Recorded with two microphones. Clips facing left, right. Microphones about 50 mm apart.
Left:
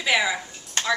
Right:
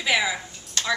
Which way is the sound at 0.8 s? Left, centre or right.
Left.